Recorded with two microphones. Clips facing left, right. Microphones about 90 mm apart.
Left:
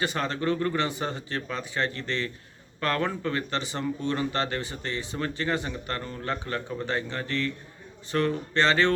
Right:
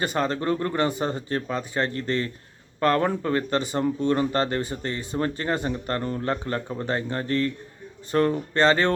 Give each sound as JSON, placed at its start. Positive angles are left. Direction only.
{"t": 0.0, "sound": "speech", "side_deg": -40}